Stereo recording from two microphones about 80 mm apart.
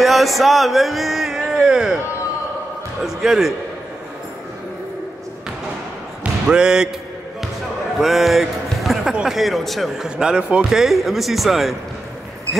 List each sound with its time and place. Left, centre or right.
0.0 s speech: centre
3.0 s speech: centre
6.4 s speech: centre
8.0 s a man's voice: centre